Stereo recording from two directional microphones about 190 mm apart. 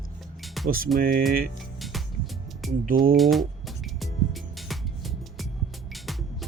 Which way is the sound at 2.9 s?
50° right (ahead or behind).